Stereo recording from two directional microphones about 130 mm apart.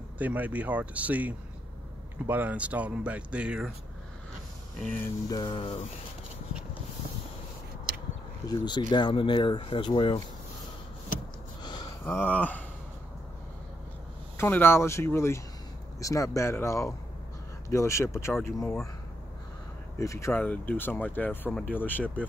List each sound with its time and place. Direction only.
0.2 s speech: 10° right (ahead or behind)
4.7 s speech: 10° left (ahead or behind)
5.3 s speech: 35° left (ahead or behind)
8.5 s speech: 35° left (ahead or behind)
11.6 s a sound: 35° left (ahead or behind)
12.1 s speech: 15° left (ahead or behind)
14.3 s speech: 20° left (ahead or behind)
20.0 s speech: 20° left (ahead or behind)